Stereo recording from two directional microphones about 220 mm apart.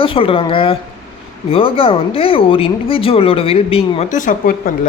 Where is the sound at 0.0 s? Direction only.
25° left (ahead or behind).